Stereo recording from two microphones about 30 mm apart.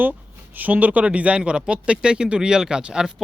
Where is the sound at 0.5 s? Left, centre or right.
Right.